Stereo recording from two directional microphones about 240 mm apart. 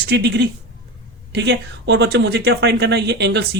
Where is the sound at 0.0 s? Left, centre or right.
Right.